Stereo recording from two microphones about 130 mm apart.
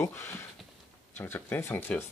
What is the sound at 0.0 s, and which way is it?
Speech, 15° left (ahead or behind).